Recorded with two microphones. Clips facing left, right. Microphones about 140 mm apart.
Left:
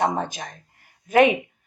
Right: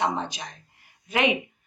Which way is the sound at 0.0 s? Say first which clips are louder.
Left 3 dB; 45° left (ahead or behind).